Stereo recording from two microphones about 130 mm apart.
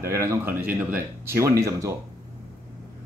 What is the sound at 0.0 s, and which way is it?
Speech, 20° right (ahead or behind).